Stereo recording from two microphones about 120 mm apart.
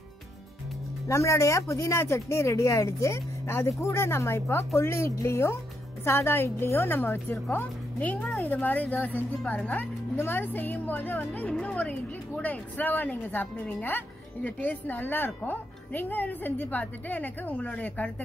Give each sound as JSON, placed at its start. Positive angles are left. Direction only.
{"t": 1.0, "sound": "speech", "side_deg": 25}
{"t": 8.5, "sound": "speech", "side_deg": 15}